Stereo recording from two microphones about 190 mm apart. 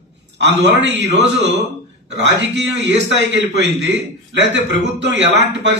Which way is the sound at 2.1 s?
65° right (ahead or behind).